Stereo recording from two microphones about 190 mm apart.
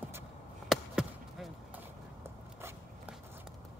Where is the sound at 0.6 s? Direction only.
Centre (ahead or behind).